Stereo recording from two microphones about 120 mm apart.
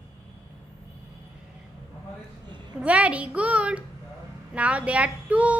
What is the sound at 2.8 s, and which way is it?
Speech, 10° right (ahead or behind).